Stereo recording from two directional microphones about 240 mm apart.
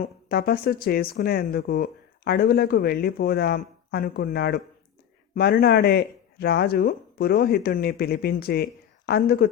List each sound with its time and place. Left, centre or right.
0.0 s speech: left